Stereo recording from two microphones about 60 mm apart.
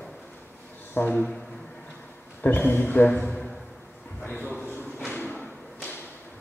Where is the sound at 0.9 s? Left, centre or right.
Left.